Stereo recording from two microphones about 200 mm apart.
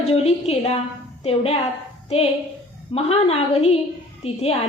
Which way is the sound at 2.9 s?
30° left (ahead or behind).